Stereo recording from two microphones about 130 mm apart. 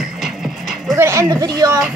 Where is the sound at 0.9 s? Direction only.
20° right (ahead or behind).